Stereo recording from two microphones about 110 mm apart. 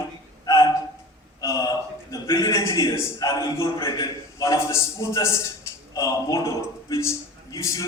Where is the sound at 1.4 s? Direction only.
30° left (ahead or behind).